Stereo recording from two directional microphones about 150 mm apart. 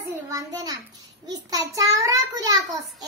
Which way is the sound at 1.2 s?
20° right (ahead or behind).